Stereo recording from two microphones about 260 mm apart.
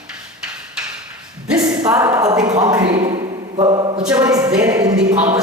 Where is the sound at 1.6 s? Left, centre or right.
Centre.